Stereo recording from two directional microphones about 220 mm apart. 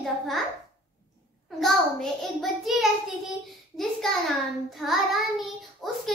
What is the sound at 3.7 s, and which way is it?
A child's voice, centre (ahead or behind).